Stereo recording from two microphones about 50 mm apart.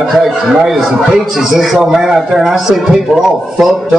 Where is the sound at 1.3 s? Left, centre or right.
Centre.